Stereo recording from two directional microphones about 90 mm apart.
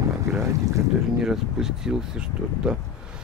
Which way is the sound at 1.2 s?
5° right (ahead or behind).